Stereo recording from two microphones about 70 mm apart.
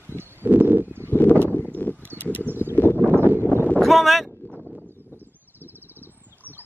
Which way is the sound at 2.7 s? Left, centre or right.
Left.